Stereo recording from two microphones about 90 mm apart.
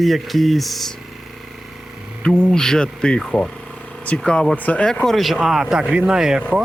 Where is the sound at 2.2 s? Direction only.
5° left (ahead or behind).